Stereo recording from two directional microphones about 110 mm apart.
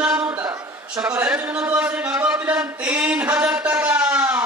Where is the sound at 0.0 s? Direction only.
15° right (ahead or behind).